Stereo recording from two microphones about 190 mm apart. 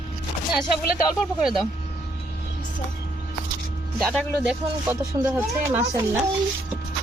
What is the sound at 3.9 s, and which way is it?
Speech, centre (ahead or behind).